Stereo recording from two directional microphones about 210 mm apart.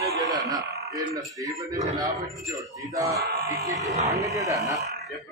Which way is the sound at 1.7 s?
15° right (ahead or behind).